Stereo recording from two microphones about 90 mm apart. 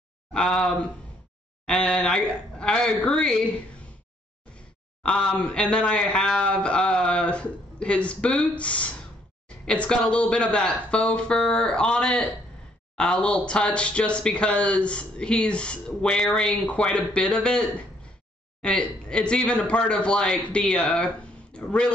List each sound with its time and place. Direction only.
0.3 s speech: 10° left (ahead or behind)
4.6 s speech: 10° left (ahead or behind)